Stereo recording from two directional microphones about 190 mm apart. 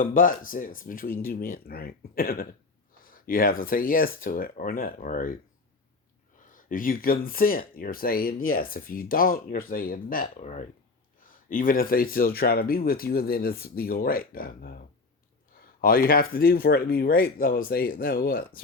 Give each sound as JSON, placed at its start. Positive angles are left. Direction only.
{"t": 0.0, "sound": "speech", "side_deg": 45}
{"t": 6.4, "sound": "a sound", "side_deg": 45}
{"t": 7.3, "sound": "speech", "side_deg": 50}
{"t": 11.2, "sound": "speech", "side_deg": 45}